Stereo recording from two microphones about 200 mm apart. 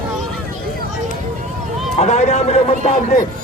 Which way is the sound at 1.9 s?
35° left (ahead or behind).